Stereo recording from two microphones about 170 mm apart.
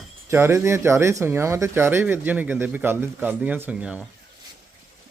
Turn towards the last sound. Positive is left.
turn(degrees=-5)  # may be behind; listen again after turning